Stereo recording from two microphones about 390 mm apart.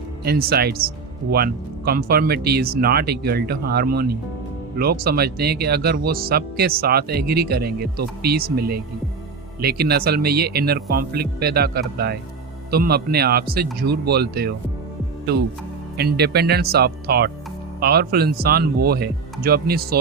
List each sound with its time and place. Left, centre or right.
0.3 s speech: right
16.0 s speech: right